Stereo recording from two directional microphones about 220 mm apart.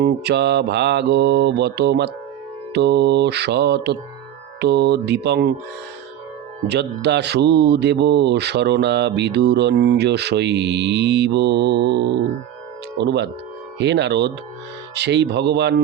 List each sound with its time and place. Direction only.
0.0 s mantra: 50° right (ahead or behind)
6.7 s mantra: 50° right (ahead or behind)